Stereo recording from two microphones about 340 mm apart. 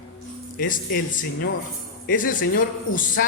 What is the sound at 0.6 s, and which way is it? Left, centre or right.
A man's voice, left.